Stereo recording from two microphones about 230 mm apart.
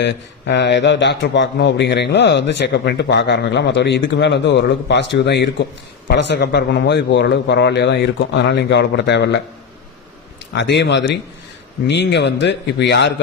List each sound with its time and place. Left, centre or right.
0.0 s speech: left
10.5 s speech: left